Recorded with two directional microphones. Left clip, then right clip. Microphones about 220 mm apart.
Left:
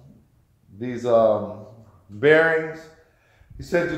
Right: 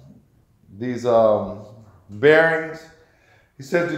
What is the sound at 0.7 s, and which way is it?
Speech, 25° right (ahead or behind).